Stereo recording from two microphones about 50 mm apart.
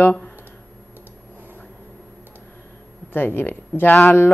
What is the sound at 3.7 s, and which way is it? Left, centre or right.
Speech, left.